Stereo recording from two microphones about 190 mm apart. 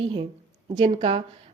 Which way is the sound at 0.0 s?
25° right (ahead or behind).